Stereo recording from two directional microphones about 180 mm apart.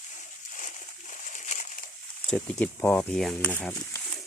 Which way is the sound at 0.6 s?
45° left (ahead or behind).